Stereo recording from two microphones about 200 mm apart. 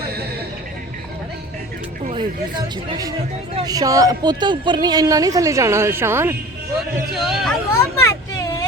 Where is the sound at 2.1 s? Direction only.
20° right (ahead or behind).